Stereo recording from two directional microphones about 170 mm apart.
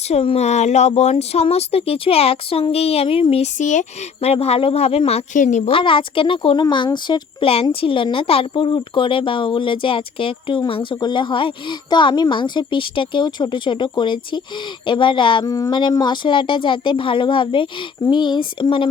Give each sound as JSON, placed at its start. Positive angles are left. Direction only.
{"t": 0.1, "sound": "speech", "side_deg": 40}
{"t": 5.7, "sound": "speech", "side_deg": 30}